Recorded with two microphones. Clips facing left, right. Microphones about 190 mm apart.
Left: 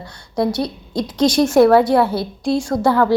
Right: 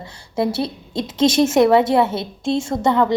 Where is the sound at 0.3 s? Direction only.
25° right (ahead or behind).